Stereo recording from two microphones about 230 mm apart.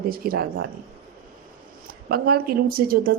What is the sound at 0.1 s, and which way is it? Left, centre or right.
Speech, right.